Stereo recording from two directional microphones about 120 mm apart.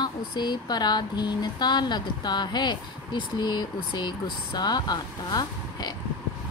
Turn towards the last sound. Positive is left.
turn(degrees=35)  # may be behind; listen again after turning